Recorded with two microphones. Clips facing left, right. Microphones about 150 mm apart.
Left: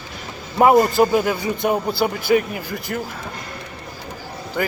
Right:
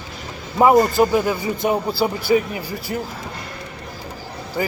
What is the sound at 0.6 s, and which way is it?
Speech, 20° left (ahead or behind).